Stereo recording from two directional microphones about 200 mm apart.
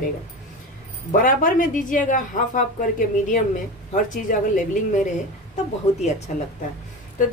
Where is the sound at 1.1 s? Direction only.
45° left (ahead or behind).